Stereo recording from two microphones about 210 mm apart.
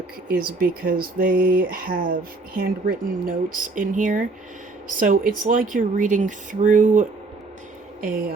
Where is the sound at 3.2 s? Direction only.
40° right (ahead or behind).